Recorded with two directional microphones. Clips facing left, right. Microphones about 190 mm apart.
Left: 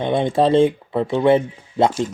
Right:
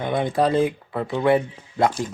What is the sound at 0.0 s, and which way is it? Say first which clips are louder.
Speech: left 4 dB; 25° left (ahead or behind).